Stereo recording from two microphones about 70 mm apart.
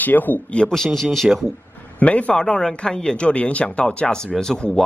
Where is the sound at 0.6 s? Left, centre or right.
Centre.